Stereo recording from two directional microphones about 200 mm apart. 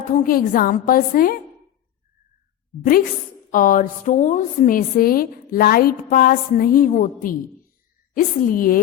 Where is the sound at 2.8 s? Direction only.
45° left (ahead or behind).